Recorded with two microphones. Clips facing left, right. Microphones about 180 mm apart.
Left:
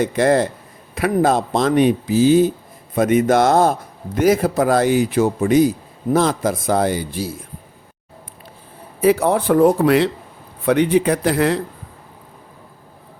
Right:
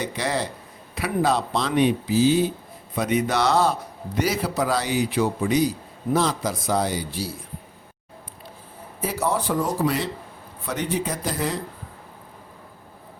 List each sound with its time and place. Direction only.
0.0 s a man's voice: 50° left (ahead or behind)
9.0 s speech: 65° left (ahead or behind)